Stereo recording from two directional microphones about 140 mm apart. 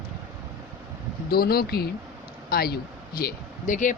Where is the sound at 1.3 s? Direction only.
90° left.